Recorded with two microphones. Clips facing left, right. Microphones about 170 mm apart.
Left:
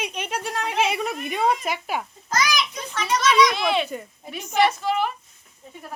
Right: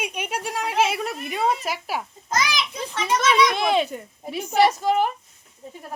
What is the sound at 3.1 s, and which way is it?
Speech, 55° right (ahead or behind).